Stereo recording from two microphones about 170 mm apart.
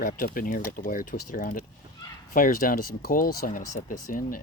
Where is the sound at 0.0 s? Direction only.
55° left (ahead or behind).